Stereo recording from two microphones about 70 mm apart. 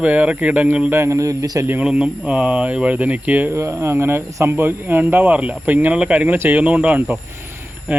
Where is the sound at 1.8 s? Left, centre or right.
Centre.